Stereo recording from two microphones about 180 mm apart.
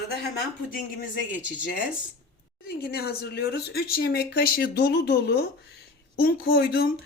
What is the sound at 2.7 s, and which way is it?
Speech, 55° left (ahead or behind).